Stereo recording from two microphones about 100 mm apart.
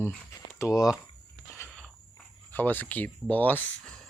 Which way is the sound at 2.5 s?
20° left (ahead or behind).